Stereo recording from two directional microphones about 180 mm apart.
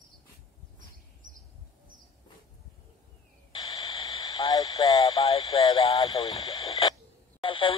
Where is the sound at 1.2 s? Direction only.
45° right (ahead or behind).